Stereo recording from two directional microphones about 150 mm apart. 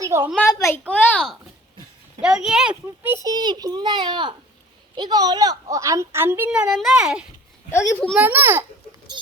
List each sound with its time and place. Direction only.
0.0 s a sound: 15° right (ahead or behind)
0.6 s speech: 15° left (ahead or behind)
2.2 s speech: 5° right (ahead or behind)
2.8 s a woman's voice: 15° right (ahead or behind)
3.3 s a child's voice: 30° right (ahead or behind); by 7.3 s 5° right (ahead or behind)
7.7 s speech: 15° left (ahead or behind)
8.2 s a woman's voice: 15° right (ahead or behind)